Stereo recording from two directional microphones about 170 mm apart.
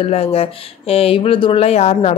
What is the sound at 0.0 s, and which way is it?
Speech, 35° left (ahead or behind).